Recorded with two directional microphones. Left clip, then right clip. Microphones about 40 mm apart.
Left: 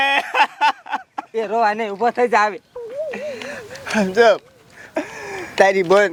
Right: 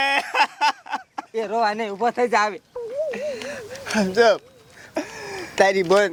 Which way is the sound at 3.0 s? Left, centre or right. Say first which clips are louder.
Even; left.